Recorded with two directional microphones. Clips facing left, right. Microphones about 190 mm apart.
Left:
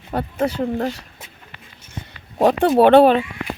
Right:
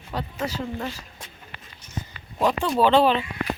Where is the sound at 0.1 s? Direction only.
55° left (ahead or behind).